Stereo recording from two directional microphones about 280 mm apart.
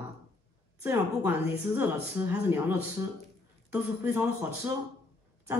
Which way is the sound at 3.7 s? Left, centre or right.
Centre.